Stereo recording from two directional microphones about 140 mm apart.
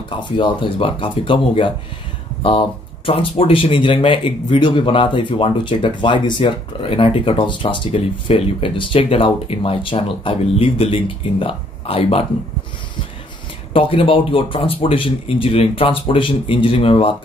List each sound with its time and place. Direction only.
0.2 s speech: 35° left (ahead or behind)
3.1 s speech: 40° left (ahead or behind)
13.7 s speech: 40° left (ahead or behind)